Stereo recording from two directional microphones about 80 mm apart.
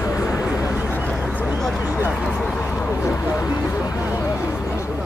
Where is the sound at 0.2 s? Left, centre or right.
Left.